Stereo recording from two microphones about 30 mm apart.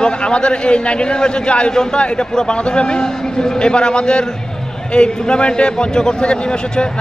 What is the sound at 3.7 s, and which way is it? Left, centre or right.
A man's voice, left.